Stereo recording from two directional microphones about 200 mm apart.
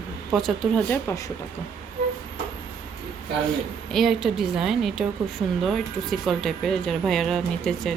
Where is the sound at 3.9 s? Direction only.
Centre (ahead or behind).